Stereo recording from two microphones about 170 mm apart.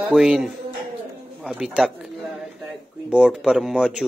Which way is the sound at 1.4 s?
5° right (ahead or behind).